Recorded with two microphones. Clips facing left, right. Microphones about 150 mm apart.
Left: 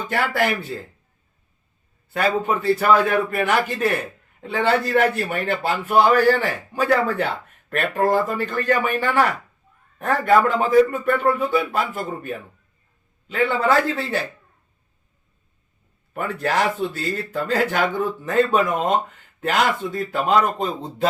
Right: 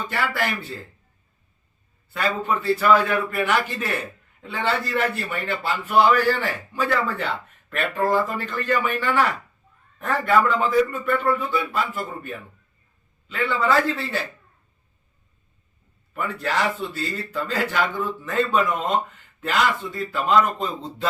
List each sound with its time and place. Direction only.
2.1 s a man's voice: 50° left (ahead or behind)
16.1 s a man's voice: 50° left (ahead or behind)